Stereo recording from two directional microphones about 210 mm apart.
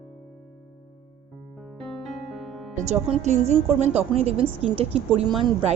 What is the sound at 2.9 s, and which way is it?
A woman's voice, 35° right (ahead or behind).